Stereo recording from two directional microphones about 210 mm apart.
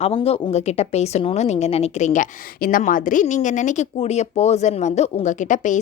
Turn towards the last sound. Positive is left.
turn(degrees=35)  # may be behind; listen again after turning